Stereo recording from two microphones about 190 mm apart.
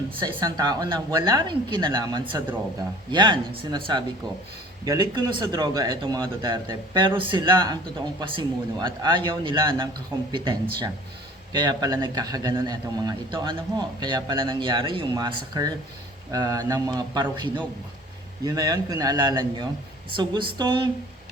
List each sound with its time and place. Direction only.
0.2 s a man's voice: 20° right (ahead or behind)